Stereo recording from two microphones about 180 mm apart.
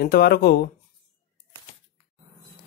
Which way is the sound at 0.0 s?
60° left (ahead or behind).